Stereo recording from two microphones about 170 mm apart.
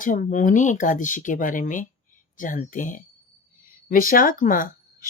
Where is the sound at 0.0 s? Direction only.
50° left (ahead or behind).